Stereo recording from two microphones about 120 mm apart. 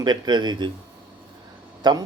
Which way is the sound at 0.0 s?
35° right (ahead or behind).